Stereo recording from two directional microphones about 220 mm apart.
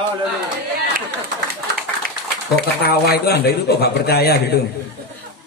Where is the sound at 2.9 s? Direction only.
45° left (ahead or behind).